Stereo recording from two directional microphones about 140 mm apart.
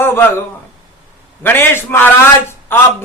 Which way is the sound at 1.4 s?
15° left (ahead or behind).